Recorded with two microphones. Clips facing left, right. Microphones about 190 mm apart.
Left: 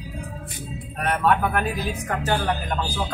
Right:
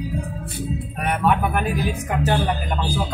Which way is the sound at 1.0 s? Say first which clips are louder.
Even; 10° right (ahead or behind).